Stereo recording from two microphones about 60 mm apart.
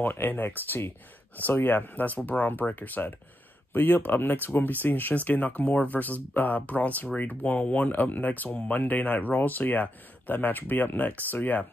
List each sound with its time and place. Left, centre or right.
0.0 s speech: left
8.5 s speech: centre
8.7 s speech: left